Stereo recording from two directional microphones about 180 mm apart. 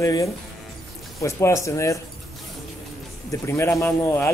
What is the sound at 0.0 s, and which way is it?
Speech, 15° left (ahead or behind).